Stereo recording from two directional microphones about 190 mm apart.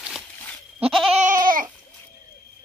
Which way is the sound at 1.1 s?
40° right (ahead or behind).